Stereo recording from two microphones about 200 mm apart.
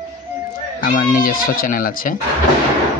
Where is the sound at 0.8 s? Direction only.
40° left (ahead or behind).